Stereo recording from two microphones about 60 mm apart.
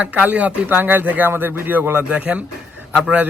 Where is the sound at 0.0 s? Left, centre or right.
Right.